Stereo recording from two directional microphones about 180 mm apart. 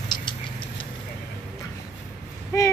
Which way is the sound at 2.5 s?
15° left (ahead or behind).